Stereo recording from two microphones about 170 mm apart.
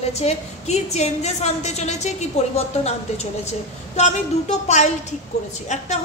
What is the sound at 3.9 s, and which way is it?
A woman's voice, 40° left (ahead or behind).